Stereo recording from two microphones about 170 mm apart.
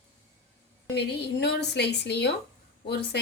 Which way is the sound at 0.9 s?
75° left (ahead or behind).